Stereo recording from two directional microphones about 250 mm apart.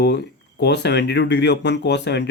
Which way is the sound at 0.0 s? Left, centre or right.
Left.